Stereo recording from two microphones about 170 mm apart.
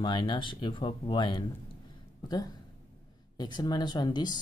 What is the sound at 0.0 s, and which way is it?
Speech, 25° left (ahead or behind).